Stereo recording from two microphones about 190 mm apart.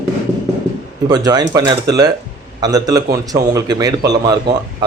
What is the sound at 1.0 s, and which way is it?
A man's voice, 20° right (ahead or behind).